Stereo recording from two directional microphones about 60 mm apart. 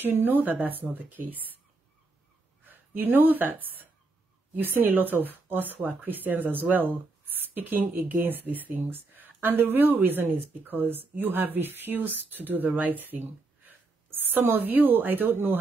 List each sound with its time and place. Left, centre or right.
0.0 s speech: right
2.6 s a woman's voice: right